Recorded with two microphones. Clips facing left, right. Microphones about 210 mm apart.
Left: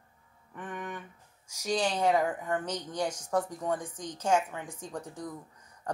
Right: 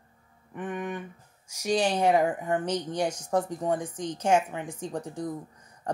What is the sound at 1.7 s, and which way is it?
Speech, 15° right (ahead or behind).